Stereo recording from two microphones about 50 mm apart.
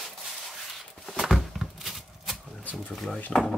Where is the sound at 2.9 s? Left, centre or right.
Centre.